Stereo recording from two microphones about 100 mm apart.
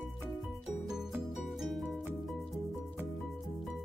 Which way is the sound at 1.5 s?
Centre (ahead or behind).